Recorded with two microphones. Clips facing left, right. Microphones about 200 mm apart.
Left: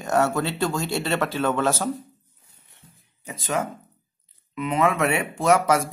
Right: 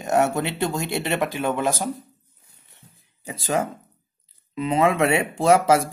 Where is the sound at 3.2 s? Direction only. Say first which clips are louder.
Right 3 dB; 35° right (ahead or behind).